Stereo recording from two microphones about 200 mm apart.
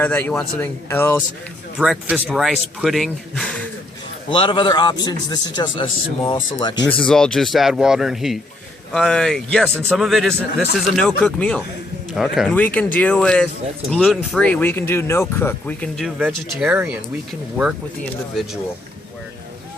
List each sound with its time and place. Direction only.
0.0 s speech: 10° left (ahead or behind)
1.8 s speech: 5° right (ahead or behind)
4.3 s a man's voice: 25° left (ahead or behind)
7.0 s speech: 5° left (ahead or behind)